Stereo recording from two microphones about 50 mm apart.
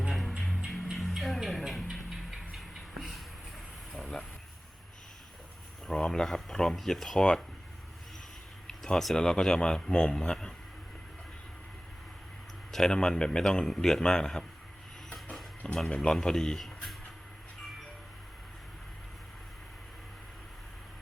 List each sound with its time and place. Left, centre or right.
0.1 s music: centre
0.9 s a sound: centre
2.9 s music: centre
3.9 s a sound: centre
5.9 s speech: centre
8.6 s speech: centre
12.7 s speech: centre
15.6 s speech: left
16.0 s speech: centre